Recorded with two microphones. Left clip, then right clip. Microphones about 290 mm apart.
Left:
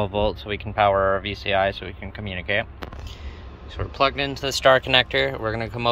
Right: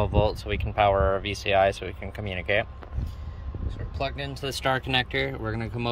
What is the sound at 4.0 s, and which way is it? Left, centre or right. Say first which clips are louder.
Speech: left 10 dB; centre.